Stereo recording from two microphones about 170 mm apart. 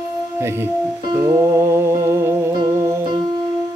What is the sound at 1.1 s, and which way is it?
Music, 20° right (ahead or behind).